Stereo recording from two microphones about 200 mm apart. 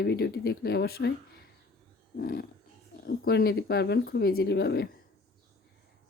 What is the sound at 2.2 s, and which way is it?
Speech, 45° left (ahead or behind).